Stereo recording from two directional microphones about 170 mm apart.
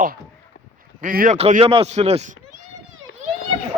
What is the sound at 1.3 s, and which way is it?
Speech, 40° right (ahead or behind).